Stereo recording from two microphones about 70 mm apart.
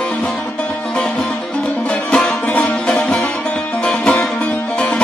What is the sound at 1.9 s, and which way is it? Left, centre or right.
Music, centre.